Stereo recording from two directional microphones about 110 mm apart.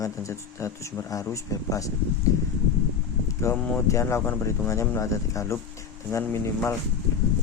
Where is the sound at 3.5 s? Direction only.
30° left (ahead or behind).